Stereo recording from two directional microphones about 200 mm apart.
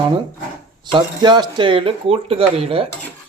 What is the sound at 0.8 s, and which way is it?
Speech, 20° right (ahead or behind).